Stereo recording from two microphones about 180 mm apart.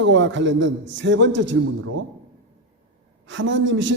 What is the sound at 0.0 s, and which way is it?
A man's voice, 90° right.